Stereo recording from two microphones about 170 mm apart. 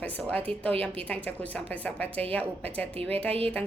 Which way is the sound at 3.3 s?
35° right (ahead or behind).